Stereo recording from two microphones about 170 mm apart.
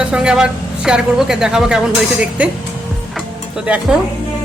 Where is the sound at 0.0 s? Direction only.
5° right (ahead or behind).